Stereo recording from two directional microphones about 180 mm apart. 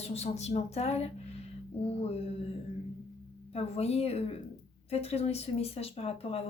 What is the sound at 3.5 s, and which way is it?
A woman's voice, 35° left (ahead or behind).